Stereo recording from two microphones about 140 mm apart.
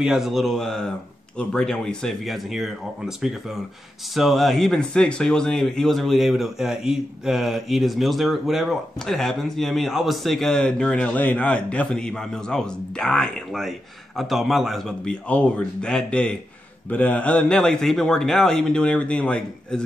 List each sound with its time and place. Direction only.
0.0 s speech: 5° right (ahead or behind)
4.1 s a man's voice: centre (ahead or behind)